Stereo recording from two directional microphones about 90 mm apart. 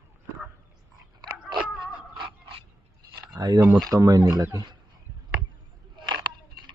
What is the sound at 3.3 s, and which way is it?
A man's voice, 50° right (ahead or behind).